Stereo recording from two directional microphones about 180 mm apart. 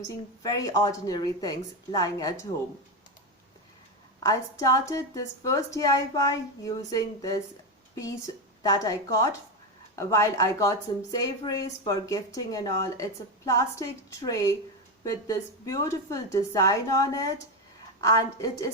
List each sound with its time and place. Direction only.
0.4 s a woman's voice: 20° left (ahead or behind)
4.2 s a woman's voice: 20° left (ahead or behind)
8.6 s a woman's voice: 20° left (ahead or behind)